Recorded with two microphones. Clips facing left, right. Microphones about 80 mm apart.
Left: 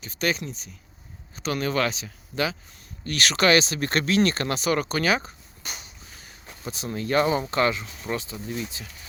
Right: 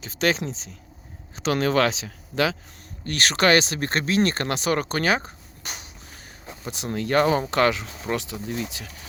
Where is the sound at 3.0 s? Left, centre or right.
Right.